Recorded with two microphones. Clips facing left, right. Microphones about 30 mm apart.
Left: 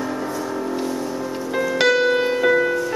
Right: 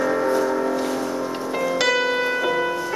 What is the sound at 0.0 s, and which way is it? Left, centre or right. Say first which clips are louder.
Music: right 6 dB; right.